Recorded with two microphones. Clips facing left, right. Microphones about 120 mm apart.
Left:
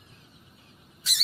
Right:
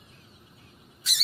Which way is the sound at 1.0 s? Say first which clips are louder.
Even; centre (ahead or behind).